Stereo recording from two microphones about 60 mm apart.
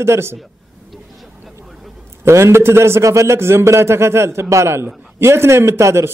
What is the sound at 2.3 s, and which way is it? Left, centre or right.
A man's voice, right.